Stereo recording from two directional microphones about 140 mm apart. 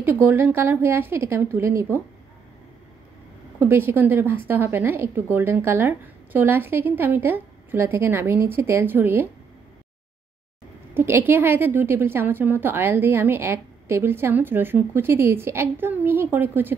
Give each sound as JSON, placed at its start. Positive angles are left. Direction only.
{"t": 0.0, "sound": "a woman's voice", "side_deg": -15}
{"t": 3.5, "sound": "a woman's voice", "side_deg": -15}
{"t": 11.0, "sound": "a woman's voice", "side_deg": -15}